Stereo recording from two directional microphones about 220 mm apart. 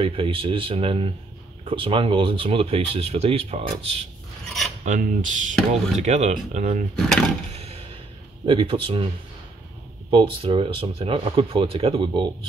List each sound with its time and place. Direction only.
0.0 s speech: 25° right (ahead or behind)
7.0 s speech: centre (ahead or behind)
8.5 s speech: 25° right (ahead or behind)
10.1 s speech: 25° right (ahead or behind)